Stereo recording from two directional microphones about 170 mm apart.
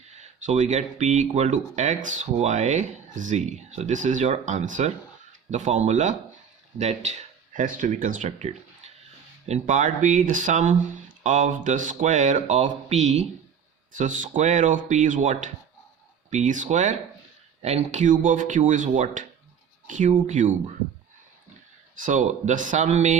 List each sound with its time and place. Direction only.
0.1 s speech: 45° right (ahead or behind)
21.9 s speech: 50° right (ahead or behind)